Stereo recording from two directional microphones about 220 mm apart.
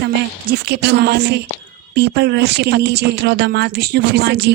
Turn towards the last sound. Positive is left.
turn(degrees=-50)  # may be behind; listen again after turning